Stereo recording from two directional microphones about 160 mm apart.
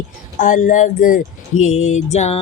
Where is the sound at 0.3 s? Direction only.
55° left (ahead or behind).